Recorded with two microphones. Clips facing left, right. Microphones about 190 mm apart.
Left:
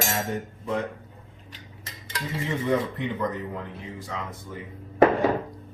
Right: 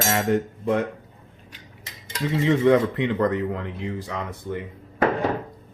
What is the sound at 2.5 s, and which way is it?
Speech, 80° right.